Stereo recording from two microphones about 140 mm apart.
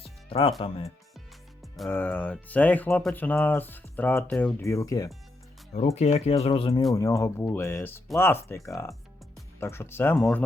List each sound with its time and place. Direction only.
0.0 s music: 40° left (ahead or behind)
1.6 s music: centre (ahead or behind)
1.9 s speech: 10° left (ahead or behind)
5.7 s speech: 50° left (ahead or behind)
6.9 s speech: 20° left (ahead or behind)